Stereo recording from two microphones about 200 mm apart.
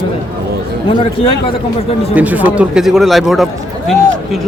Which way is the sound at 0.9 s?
25° left (ahead or behind).